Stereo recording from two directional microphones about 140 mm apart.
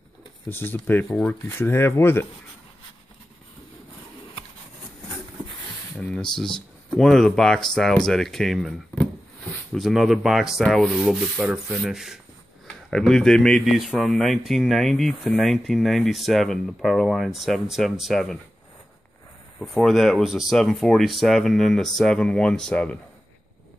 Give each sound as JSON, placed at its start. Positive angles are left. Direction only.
{"t": 0.5, "sound": "speech", "side_deg": 15}
{"t": 5.9, "sound": "speech", "side_deg": 5}
{"t": 19.6, "sound": "speech", "side_deg": 0}